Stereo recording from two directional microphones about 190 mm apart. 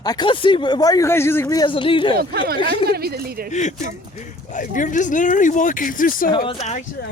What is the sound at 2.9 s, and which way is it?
Speech, 55° right (ahead or behind).